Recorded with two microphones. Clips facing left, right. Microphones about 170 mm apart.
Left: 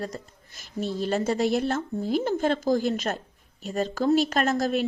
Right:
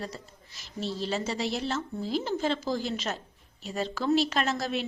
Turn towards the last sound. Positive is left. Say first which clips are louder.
# left 5 dB
turn(degrees=45)  # may be behind; listen again after turning